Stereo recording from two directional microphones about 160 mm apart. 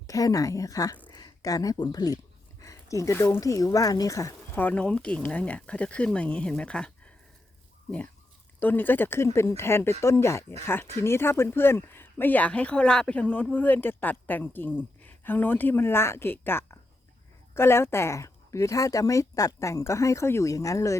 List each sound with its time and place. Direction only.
0.1 s speech: 20° left (ahead or behind)